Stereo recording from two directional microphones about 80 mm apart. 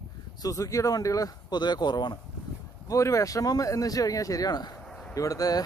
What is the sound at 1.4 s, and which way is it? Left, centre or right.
Speech, left.